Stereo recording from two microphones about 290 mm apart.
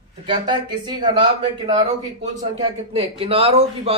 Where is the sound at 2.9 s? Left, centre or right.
Centre.